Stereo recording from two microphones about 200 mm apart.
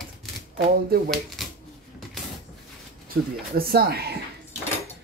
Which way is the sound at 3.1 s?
50° right (ahead or behind).